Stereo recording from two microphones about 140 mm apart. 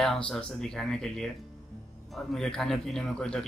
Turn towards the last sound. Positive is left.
turn(degrees=5)  # may be behind; listen again after turning